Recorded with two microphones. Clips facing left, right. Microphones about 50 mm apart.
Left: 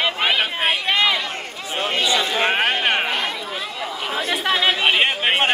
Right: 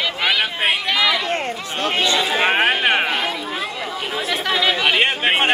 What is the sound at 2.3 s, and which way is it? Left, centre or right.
Speech, centre.